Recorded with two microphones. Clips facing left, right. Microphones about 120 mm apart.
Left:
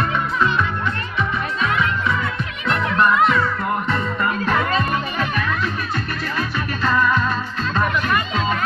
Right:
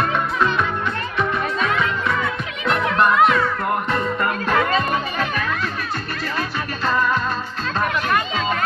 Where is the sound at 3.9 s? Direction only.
50° right (ahead or behind).